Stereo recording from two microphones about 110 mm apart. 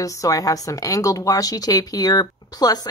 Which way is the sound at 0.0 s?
30° left (ahead or behind).